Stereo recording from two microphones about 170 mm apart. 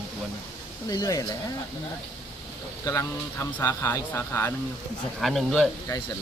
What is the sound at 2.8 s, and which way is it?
Speech, 20° left (ahead or behind).